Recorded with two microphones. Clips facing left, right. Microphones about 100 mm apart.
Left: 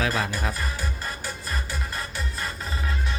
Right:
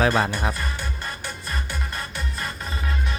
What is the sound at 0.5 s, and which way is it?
Music, 5° left (ahead or behind).